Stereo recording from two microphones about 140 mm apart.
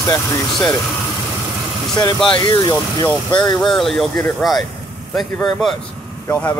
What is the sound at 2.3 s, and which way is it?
Speech, 30° left (ahead or behind).